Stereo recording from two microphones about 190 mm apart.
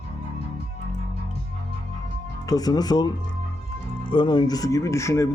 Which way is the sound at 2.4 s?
20° left (ahead or behind).